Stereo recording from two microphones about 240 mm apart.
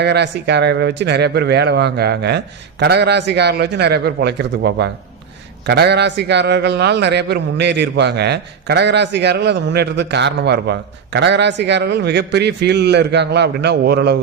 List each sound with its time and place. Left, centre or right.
0.0 s a man's voice: right